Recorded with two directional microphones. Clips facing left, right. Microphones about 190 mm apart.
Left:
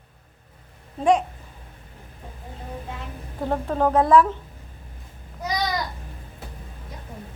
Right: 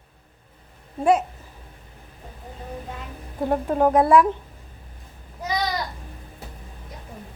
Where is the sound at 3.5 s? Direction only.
15° right (ahead or behind).